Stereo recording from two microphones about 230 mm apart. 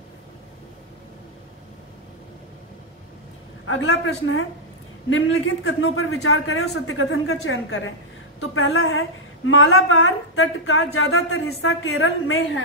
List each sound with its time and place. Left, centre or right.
3.6 s speech: left